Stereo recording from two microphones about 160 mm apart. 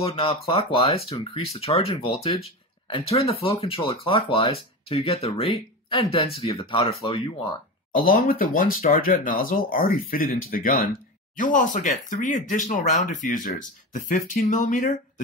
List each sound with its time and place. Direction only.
0.0 s speech: 35° left (ahead or behind)
7.9 s speech: 60° left (ahead or behind)